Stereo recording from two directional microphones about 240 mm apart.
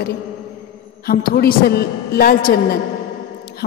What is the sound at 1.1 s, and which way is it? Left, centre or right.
A man's voice, left.